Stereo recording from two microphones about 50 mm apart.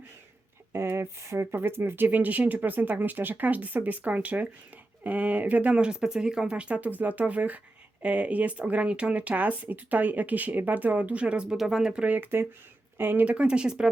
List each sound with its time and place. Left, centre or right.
0.7 s speech: right; by 12.0 s centre
12.0 s speech: right
13.2 s speech: right